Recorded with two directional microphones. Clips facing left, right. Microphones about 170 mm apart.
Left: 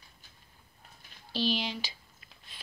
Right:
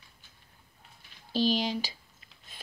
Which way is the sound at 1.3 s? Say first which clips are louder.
Right 4 dB; 45° right (ahead or behind).